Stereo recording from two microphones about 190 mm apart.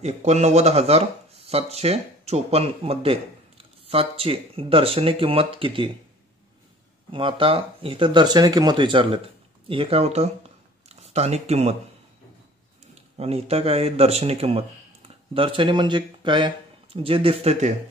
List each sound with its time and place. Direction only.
0.0 s speech: 35° right (ahead or behind)
7.1 s speech: 25° right (ahead or behind)
13.2 s speech: 30° right (ahead or behind)